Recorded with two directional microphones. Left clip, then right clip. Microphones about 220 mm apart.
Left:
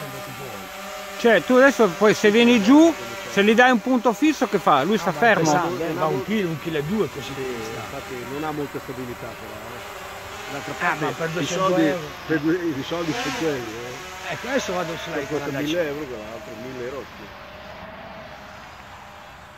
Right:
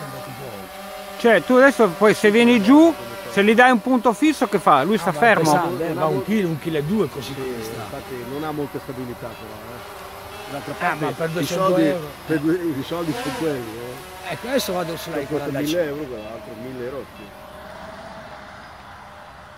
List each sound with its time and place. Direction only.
1.1 s speech: centre (ahead or behind)
5.4 s speech: 50° right (ahead or behind)
7.3 s speech: centre (ahead or behind)
10.5 s speech: centre (ahead or behind)
10.8 s speech: 45° right (ahead or behind)
13.0 s speech: centre (ahead or behind)
15.3 s speech: 40° right (ahead or behind)